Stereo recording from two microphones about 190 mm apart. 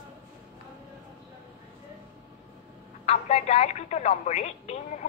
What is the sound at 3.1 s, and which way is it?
Speech, 35° left (ahead or behind).